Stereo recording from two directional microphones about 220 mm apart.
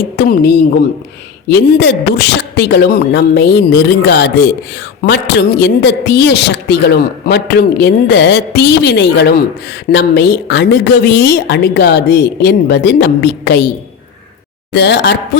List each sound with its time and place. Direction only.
0.2 s a woman's voice: 45° left (ahead or behind)
14.7 s a woman's voice: 50° left (ahead or behind)